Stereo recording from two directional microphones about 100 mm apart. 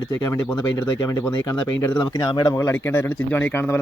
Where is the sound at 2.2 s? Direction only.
30° left (ahead or behind).